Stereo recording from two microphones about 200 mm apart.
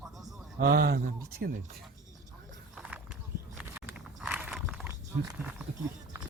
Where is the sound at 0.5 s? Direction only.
50° right (ahead or behind).